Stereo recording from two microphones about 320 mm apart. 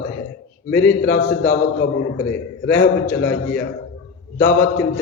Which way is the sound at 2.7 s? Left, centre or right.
Left.